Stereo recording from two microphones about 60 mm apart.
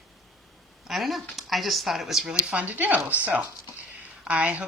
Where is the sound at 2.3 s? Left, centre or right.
Centre.